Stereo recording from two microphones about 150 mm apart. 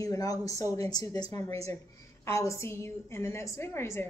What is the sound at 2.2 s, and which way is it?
A woman's voice, 20° left (ahead or behind).